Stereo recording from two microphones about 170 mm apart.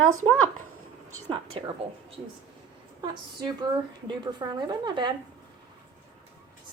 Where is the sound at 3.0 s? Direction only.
25° right (ahead or behind).